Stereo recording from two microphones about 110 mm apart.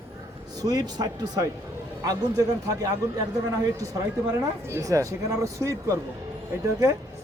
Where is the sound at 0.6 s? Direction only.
35° right (ahead or behind).